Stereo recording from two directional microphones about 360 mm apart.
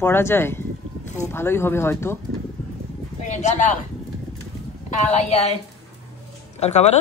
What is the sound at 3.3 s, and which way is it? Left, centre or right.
Speech, centre.